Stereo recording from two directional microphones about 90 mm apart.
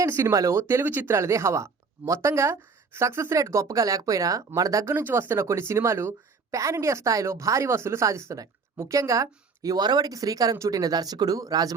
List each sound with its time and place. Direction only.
0.0 s a woman's voice: 30° right (ahead or behind)
4.9 s a woman's voice: 25° right (ahead or behind); by 11.7 s 45° right (ahead or behind)